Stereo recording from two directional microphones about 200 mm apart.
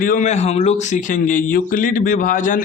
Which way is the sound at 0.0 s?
40° left (ahead or behind).